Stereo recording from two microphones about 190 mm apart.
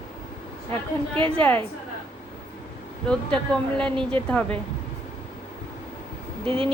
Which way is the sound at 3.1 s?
5° left (ahead or behind).